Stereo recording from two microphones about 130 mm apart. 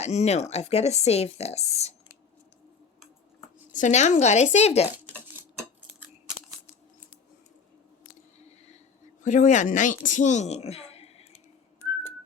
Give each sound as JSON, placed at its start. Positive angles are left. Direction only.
{"t": 0.0, "sound": "speech", "side_deg": 60}
{"t": 3.7, "sound": "speech", "side_deg": 70}
{"t": 8.4, "sound": "a sound", "side_deg": 55}
{"t": 9.2, "sound": "a woman's voice", "side_deg": 75}